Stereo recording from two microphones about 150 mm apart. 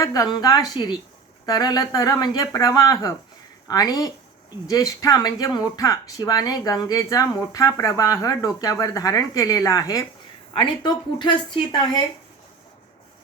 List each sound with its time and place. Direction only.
0.0 s speech: 25° left (ahead or behind)